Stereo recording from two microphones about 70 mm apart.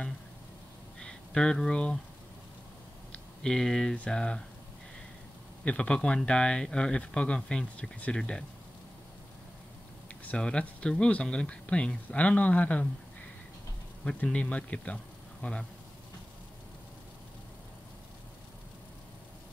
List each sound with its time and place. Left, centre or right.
0.9 s a sound: centre
3.1 s a sound: centre
3.9 s speech: centre
5.7 s speech: centre
10.2 s speech: centre
14.0 s speech: centre